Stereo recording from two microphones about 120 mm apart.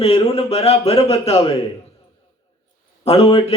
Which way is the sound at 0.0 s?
55° left (ahead or behind).